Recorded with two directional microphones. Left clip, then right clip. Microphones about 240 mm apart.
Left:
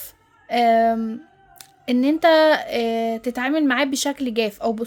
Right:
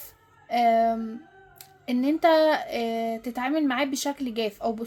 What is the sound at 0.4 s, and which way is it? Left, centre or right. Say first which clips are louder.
A woman's voice: left 4 dB; left.